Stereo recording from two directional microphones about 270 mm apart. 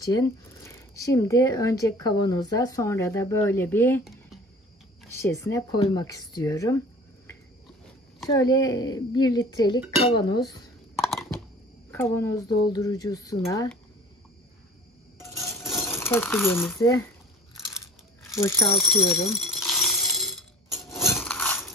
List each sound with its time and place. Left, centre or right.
0.0 s speech: centre
8.3 s speech: centre
11.0 s a sound: centre
11.9 s speech: centre
15.4 s a sound: centre
17.6 s crunch: centre
18.9 s speech: centre
19.3 s coin: centre